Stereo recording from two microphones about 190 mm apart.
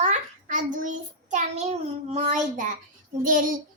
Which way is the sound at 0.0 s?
40° right (ahead or behind).